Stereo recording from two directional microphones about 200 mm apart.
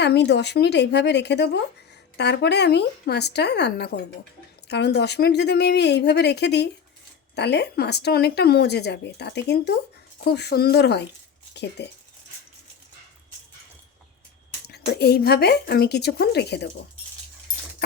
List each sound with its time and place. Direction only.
0.0 s speech: 60° left (ahead or behind)
14.7 s a woman's voice: 55° left (ahead or behind)